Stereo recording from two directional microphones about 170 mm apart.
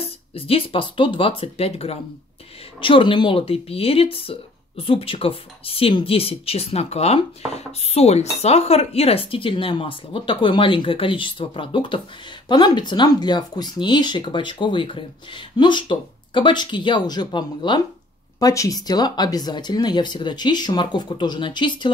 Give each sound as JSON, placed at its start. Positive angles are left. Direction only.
{"t": 0.3, "sound": "speech", "side_deg": 35}